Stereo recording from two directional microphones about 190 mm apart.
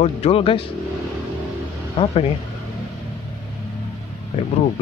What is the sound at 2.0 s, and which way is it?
Speech, 30° left (ahead or behind).